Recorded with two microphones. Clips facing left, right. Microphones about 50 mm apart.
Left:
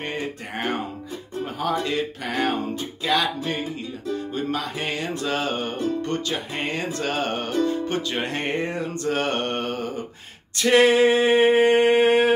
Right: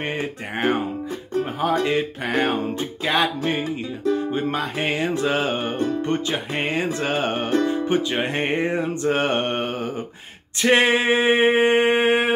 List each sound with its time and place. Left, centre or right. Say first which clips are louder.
0.0 s music: right 3 dB; right
4.3 s music: right 3 dB; right
10.6 s a sound: left 1 dB; right